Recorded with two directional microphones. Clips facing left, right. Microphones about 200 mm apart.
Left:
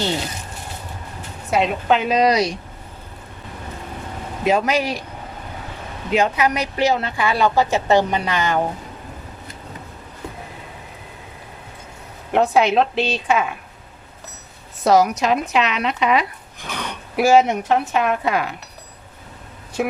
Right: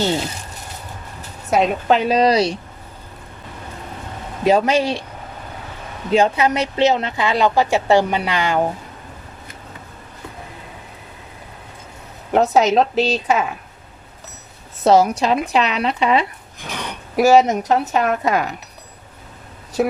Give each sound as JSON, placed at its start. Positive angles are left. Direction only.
{"t": 1.5, "sound": "speech", "side_deg": -45}
{"t": 4.4, "sound": "speech", "side_deg": -30}
{"t": 6.1, "sound": "a woman's voice", "side_deg": -30}
{"t": 12.3, "sound": "speech", "side_deg": -40}
{"t": 14.8, "sound": "speech", "side_deg": -30}
{"t": 19.8, "sound": "speech", "side_deg": -35}